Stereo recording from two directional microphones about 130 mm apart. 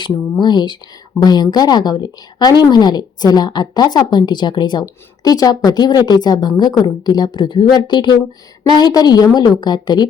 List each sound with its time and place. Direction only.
0.0 s a woman's voice: 35° left (ahead or behind)